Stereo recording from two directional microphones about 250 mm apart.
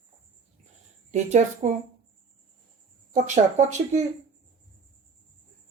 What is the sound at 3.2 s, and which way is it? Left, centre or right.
Speech, right.